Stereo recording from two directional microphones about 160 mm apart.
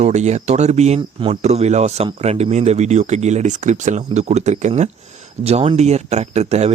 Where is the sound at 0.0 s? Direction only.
45° right (ahead or behind).